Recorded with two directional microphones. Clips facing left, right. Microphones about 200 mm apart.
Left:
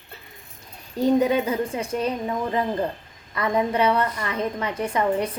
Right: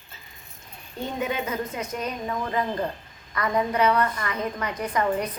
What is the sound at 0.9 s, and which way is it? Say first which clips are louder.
A woman's voice: left 9 dB; 35° left (ahead or behind).